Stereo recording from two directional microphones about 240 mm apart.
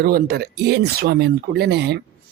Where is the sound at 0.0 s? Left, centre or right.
Right.